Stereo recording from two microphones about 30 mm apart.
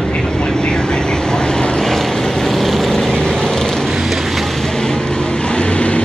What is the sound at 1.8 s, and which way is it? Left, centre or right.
Vehicle, centre.